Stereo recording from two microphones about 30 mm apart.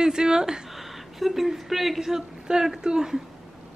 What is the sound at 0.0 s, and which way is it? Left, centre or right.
Speech, right.